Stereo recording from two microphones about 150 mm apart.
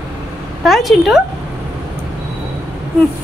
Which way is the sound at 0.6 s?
Centre (ahead or behind).